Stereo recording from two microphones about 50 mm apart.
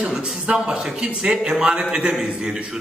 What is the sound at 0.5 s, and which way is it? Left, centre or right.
A man's voice, centre.